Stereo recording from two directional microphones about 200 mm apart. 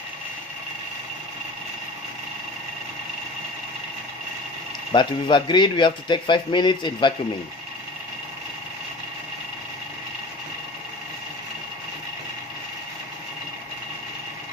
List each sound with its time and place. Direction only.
4.9 s speech: 20° left (ahead or behind)